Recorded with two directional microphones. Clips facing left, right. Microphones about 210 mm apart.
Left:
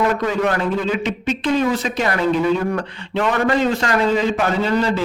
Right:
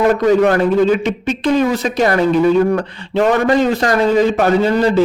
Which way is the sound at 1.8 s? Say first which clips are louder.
Right 5 dB; 40° right (ahead or behind).